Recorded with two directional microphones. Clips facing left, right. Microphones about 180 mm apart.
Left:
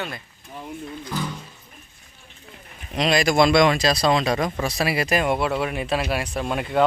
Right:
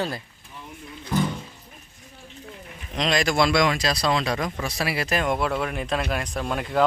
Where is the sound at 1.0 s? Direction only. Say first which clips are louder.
Right 6 dB; 25° right (ahead or behind).